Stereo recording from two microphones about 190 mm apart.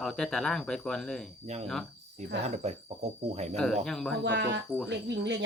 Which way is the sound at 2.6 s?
35° right (ahead or behind).